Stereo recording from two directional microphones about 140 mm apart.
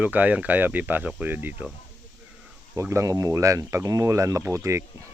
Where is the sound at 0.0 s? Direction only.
10° right (ahead or behind).